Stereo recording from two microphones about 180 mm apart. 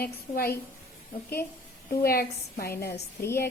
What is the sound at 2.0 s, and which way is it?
A woman's voice, 55° left (ahead or behind).